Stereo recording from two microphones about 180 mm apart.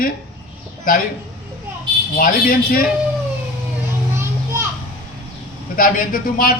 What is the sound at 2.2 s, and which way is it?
Speech, 55° left (ahead or behind).